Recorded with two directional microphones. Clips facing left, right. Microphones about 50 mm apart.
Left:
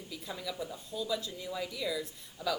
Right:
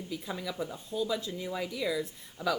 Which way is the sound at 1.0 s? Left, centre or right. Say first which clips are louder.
Right 2 dB; right.